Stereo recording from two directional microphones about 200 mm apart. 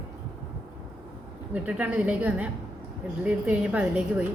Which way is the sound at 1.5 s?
5° right (ahead or behind).